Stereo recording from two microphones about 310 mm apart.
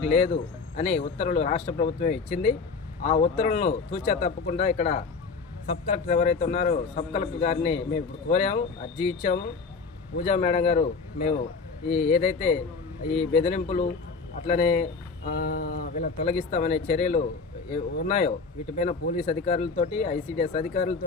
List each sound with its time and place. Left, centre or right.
0.0 s a man's voice: left
11.9 s a man's voice: centre